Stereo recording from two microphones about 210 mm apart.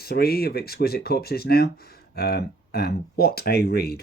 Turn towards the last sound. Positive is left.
turn(degrees=50)  # may be behind; listen again after turning